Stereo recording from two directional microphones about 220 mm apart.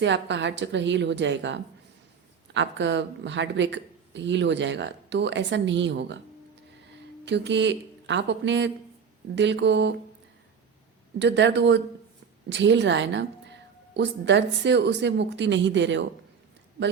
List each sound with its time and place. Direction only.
0.0 s a woman's voice: 55° right (ahead or behind)
7.3 s speech: 55° right (ahead or behind)
11.2 s speech: 55° right (ahead or behind)